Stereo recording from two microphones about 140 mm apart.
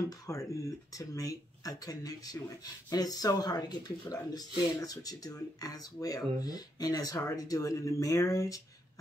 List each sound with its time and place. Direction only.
0.3 s speech: 25° left (ahead or behind)